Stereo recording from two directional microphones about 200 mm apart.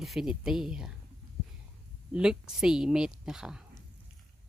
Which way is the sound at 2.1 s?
5° right (ahead or behind).